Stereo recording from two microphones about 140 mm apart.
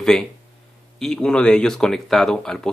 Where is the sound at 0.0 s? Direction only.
5° left (ahead or behind).